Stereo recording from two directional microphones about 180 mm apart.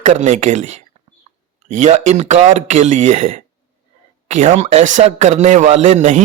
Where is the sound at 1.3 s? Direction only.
35° right (ahead or behind).